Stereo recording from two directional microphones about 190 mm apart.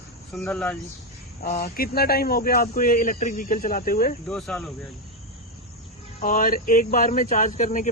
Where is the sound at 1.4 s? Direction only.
50° left (ahead or behind).